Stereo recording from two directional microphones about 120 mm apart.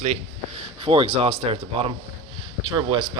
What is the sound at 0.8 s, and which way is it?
Speech, 50° right (ahead or behind).